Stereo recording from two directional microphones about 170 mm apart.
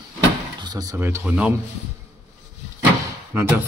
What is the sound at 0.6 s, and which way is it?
Speech, 25° right (ahead or behind).